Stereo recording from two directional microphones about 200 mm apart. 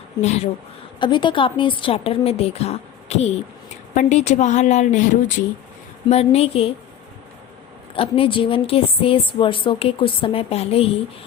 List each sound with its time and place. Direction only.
0.2 s a woman's voice: 35° left (ahead or behind)
0.9 s a woman's voice: 25° left (ahead or behind)
6.1 s a woman's voice: 30° left (ahead or behind)
7.9 s a woman's voice: 30° left (ahead or behind)